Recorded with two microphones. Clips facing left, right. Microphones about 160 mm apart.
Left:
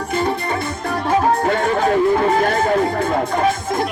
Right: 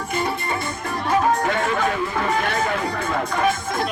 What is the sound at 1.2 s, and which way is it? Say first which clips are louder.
Music: left 3 dB; 35° left (ahead or behind).